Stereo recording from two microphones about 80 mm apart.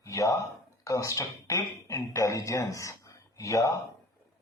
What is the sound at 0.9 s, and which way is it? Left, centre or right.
A man's voice, left.